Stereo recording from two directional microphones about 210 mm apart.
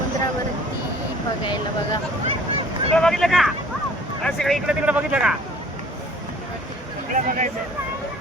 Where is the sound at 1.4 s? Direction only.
20° left (ahead or behind).